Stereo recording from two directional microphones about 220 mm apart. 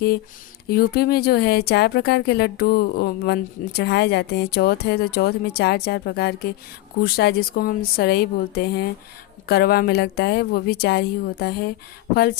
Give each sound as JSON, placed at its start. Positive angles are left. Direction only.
{"t": 0.7, "sound": "a woman's voice", "side_deg": 45}